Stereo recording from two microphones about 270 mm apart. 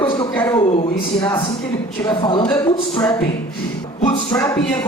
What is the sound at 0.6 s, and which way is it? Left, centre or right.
Speech, left.